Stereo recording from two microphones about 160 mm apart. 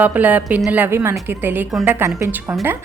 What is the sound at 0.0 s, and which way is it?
A woman's voice, 10° right (ahead or behind).